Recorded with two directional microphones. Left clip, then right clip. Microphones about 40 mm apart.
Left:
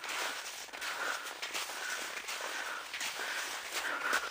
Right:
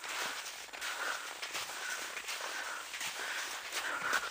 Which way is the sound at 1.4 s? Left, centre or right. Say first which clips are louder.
Left 2 dB; left.